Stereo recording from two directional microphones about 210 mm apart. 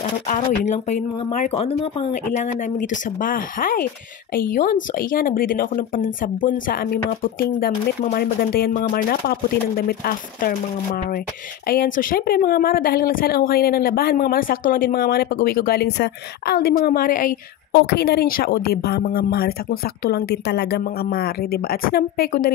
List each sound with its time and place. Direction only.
0.3 s a woman's voice: 35° left (ahead or behind)
11.6 s a woman's voice: 45° left (ahead or behind)